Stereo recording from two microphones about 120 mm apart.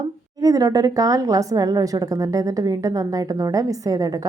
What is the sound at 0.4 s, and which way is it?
Speech, 30° right (ahead or behind).